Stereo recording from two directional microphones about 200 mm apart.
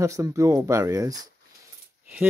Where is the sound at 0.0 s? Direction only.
15° right (ahead or behind).